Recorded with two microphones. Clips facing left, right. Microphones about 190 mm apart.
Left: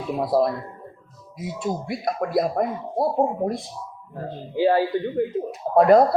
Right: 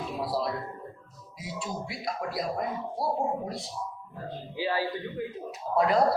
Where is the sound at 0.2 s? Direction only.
50° left (ahead or behind).